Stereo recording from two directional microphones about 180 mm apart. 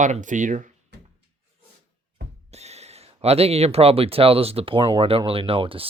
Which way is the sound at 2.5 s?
35° right (ahead or behind).